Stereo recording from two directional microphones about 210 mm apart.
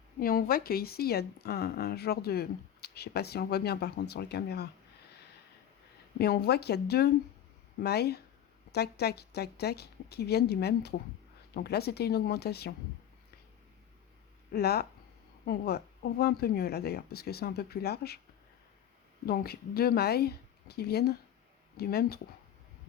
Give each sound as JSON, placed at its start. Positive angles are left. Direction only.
{"t": 0.2, "sound": "speech", "side_deg": 45}
{"t": 6.1, "sound": "speech", "side_deg": 50}
{"t": 14.5, "sound": "speech", "side_deg": 50}
{"t": 19.2, "sound": "speech", "side_deg": 45}